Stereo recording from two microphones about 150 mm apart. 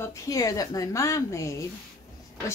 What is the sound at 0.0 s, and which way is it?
A woman's voice, 20° left (ahead or behind).